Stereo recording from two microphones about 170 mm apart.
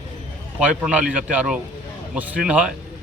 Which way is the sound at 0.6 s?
10° right (ahead or behind).